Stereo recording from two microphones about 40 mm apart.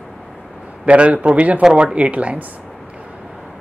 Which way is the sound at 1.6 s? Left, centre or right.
Centre.